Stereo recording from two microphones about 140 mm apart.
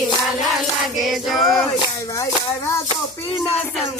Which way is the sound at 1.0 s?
Centre (ahead or behind).